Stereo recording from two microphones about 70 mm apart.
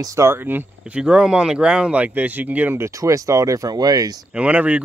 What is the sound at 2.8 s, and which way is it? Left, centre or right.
Speech, right.